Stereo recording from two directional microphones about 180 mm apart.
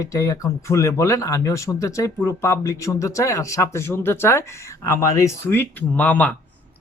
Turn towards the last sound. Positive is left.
turn(degrees=10)  # may be behind; listen again after turning